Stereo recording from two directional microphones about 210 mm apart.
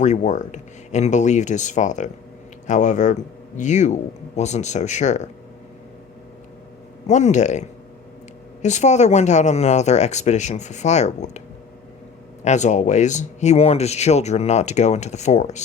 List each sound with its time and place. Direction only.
0.0 s speech: 35° left (ahead or behind)
7.1 s speech: 35° left (ahead or behind)
12.5 s speech: 35° left (ahead or behind)